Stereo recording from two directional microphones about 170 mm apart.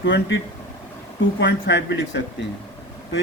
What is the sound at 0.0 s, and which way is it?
Speech, 90° left.